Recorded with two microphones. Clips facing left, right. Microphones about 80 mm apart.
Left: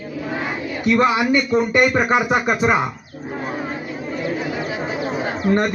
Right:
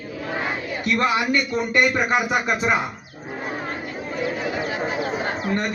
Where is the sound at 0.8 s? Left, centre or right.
Centre.